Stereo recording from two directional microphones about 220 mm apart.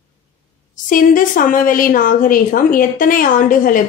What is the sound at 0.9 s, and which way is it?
A woman's voice, 40° left (ahead or behind).